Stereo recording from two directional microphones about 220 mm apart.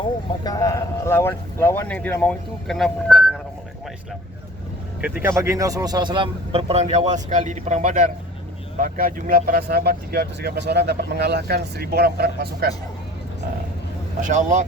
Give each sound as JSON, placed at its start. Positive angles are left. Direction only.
{"t": 0.4, "sound": "speech", "side_deg": 15}
{"t": 4.9, "sound": "speech", "side_deg": -5}
{"t": 14.2, "sound": "speech", "side_deg": -35}